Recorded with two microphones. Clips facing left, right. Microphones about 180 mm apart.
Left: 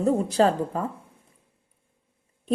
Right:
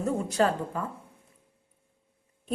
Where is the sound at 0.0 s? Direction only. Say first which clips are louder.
Left 5 dB; 30° left (ahead or behind).